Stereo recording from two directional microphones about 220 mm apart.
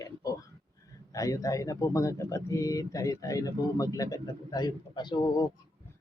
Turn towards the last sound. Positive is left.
turn(degrees=15)  # may be behind; listen again after turning